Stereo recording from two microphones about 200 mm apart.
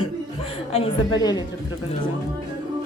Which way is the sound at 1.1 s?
20° left (ahead or behind).